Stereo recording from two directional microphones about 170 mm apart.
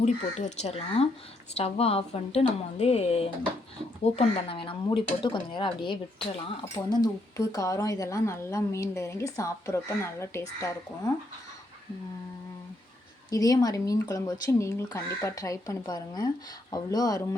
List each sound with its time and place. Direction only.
0.0 s speech: 40° left (ahead or behind); by 10.4 s 15° left (ahead or behind)
13.3 s speech: 20° left (ahead or behind)